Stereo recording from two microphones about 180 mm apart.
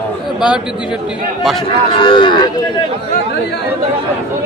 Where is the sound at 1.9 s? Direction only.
30° left (ahead or behind).